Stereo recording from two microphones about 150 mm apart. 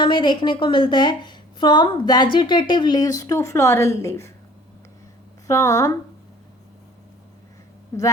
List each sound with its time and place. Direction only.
0.0 s a woman's voice: 35° left (ahead or behind)
5.5 s speech: 20° left (ahead or behind)